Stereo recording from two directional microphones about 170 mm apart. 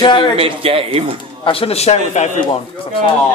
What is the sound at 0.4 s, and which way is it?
Speech, 35° right (ahead or behind).